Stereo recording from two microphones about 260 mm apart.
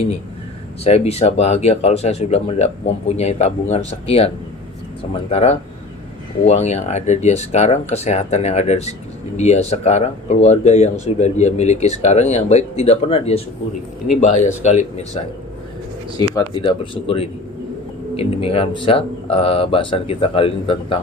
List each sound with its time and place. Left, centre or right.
0.9 s speech: left
5.3 s speech: left
14.4 s speech: left
16.3 s speech: centre